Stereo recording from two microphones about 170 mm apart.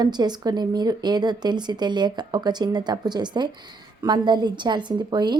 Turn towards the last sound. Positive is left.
turn(degrees=-25)  # may be behind; listen again after turning